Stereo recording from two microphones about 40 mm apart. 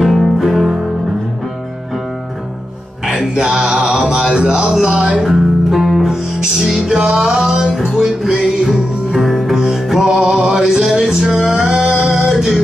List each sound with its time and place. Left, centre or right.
0.4 s music: centre
3.1 s music: centre
5.2 s music: centre